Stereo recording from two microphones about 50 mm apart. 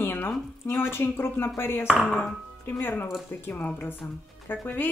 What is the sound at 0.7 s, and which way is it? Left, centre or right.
A woman's voice, left.